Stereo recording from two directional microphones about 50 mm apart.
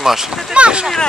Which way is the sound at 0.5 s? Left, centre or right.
Centre.